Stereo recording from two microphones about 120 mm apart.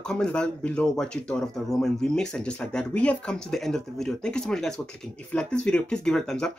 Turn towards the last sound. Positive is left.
turn(degrees=5)  # may be behind; listen again after turning